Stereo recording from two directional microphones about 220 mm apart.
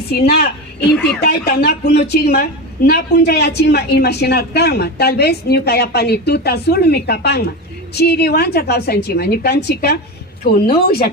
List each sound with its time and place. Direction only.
0.1 s a woman's voice: 45° left (ahead or behind)